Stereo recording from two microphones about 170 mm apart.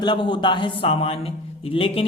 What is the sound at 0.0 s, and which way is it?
A man's voice, 25° left (ahead or behind).